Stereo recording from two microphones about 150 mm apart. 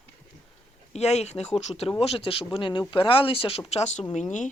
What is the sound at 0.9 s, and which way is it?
Speech, 45° left (ahead or behind).